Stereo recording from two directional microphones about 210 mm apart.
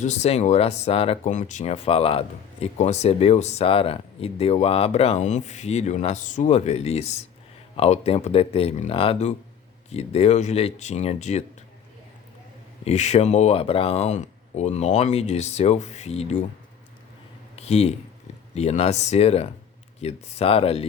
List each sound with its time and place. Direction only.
0.0 s speech: 35° left (ahead or behind)
12.8 s speech: 30° left (ahead or behind)
17.6 s speech: 30° left (ahead or behind)